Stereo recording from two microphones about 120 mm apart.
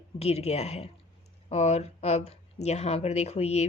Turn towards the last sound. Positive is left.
turn(degrees=65)  # may be behind; listen again after turning